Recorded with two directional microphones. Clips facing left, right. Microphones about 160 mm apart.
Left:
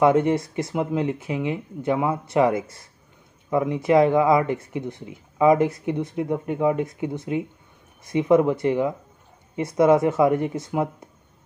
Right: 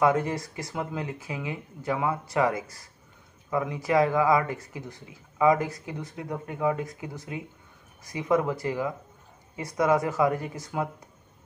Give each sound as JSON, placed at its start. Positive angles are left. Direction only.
{"t": 0.0, "sound": "speech", "side_deg": 25}